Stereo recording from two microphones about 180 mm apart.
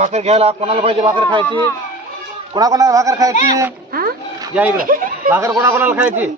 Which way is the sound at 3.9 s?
55° right (ahead or behind).